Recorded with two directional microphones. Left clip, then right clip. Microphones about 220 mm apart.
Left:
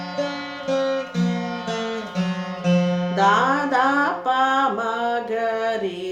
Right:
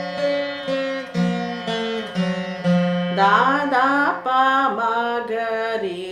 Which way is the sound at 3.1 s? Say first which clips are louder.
Right 2 dB; 10° left (ahead or behind).